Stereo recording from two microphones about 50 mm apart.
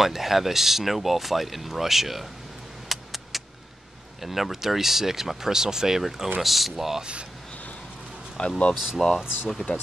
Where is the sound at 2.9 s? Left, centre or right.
Centre.